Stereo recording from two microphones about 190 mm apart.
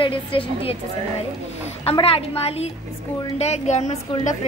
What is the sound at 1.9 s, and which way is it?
A woman's voice, 30° left (ahead or behind).